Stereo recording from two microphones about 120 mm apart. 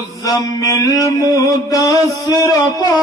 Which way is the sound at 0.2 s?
30° left (ahead or behind).